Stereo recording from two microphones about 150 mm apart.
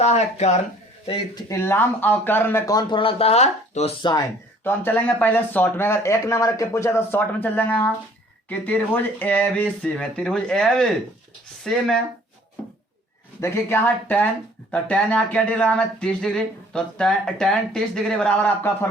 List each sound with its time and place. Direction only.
0.0 s speech: 45° left (ahead or behind)
1.0 s speech: 30° left (ahead or behind)
1.5 s speech: 15° left (ahead or behind)
3.0 s speech: 40° left (ahead or behind)
4.6 s speech: 15° left (ahead or behind)
13.4 s speech: 15° left (ahead or behind)